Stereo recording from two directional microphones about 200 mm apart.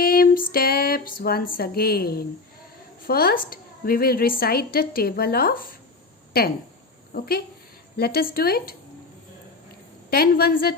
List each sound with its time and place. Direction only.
0.0 s female singing: 45° left (ahead or behind)
3.1 s a woman's voice: 45° left (ahead or behind)
7.1 s a woman's voice: 50° left (ahead or behind)
10.1 s a woman's voice: 50° left (ahead or behind)